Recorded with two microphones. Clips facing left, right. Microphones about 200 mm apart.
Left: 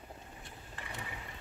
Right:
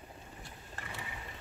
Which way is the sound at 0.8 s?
45° right (ahead or behind).